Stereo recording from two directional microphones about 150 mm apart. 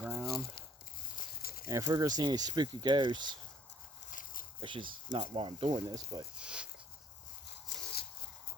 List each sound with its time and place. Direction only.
0.0 s crumpling: 15° right (ahead or behind)
1.4 s a sound: 85° left
1.6 s speech: 25° right (ahead or behind)
4.1 s walk: 65° left (ahead or behind)
4.6 s speech: 35° right (ahead or behind)
6.3 s speech: 5° right (ahead or behind)